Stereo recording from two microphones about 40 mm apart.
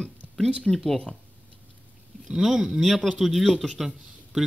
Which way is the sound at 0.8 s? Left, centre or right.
Centre.